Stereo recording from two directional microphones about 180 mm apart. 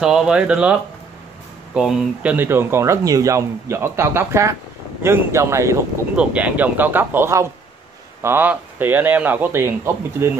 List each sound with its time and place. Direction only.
0.0 s speech: 5° right (ahead or behind)